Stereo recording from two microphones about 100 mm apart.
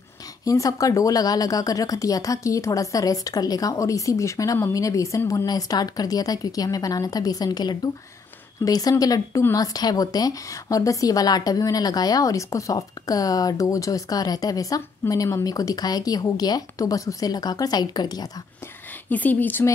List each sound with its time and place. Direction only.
0.5 s a woman's voice: 35° left (ahead or behind)
19.0 s speech: 15° left (ahead or behind)